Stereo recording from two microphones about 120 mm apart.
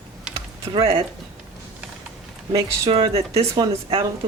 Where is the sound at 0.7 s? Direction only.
40° right (ahead or behind).